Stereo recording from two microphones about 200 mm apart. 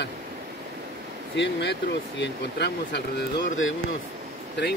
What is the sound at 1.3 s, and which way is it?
Speech, 60° left (ahead or behind).